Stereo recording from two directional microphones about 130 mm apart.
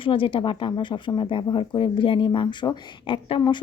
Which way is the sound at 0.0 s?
40° left (ahead or behind).